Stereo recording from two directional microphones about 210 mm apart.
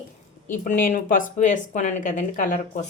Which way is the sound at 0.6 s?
40° left (ahead or behind).